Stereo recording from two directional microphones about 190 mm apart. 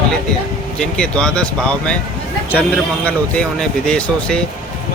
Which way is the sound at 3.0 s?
5° left (ahead or behind).